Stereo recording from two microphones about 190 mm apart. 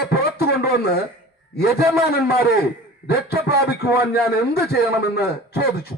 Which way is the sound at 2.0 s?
55° left (ahead or behind).